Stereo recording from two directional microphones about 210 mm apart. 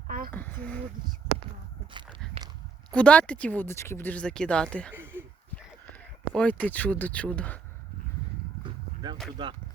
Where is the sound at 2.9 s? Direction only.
5° left (ahead or behind).